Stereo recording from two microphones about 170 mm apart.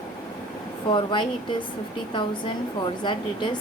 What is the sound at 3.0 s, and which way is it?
Speech, 25° left (ahead or behind).